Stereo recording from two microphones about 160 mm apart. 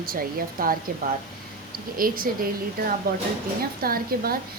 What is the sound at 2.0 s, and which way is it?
A woman's voice, 65° right (ahead or behind).